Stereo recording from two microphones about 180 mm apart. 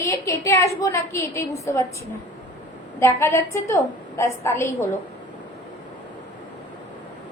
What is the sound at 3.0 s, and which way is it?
A woman's voice, 15° left (ahead or behind).